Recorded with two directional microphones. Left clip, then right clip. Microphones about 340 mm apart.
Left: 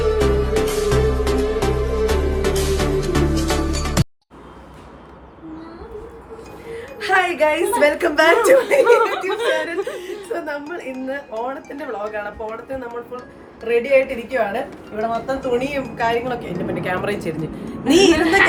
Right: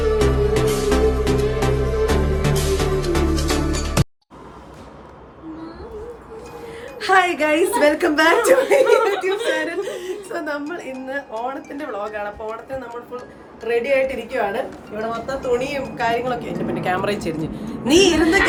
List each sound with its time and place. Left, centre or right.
0.0 s music: centre
6.7 s a woman's voice: centre
9.3 s chuckle: centre
10.0 s speech: centre
13.7 s speech: centre